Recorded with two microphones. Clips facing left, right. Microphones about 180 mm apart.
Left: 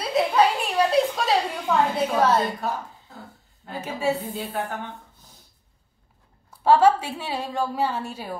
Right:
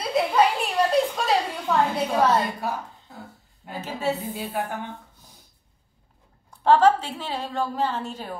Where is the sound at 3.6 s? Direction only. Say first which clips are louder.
Left 1 dB; 15° right (ahead or behind).